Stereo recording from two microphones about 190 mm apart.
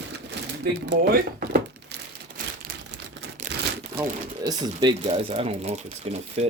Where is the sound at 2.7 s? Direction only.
55° right (ahead or behind).